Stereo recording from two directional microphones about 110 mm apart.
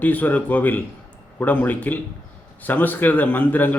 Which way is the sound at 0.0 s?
15° left (ahead or behind).